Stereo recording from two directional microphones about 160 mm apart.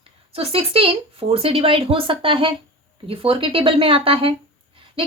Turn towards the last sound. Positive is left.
turn(degrees=-35)  # may be behind; listen again after turning